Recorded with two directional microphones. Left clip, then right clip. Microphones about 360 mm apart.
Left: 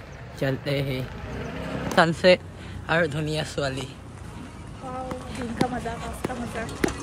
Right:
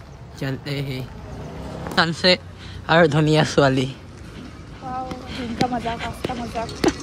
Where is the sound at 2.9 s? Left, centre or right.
Centre.